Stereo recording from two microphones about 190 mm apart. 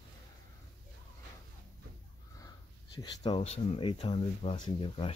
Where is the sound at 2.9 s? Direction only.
25° left (ahead or behind).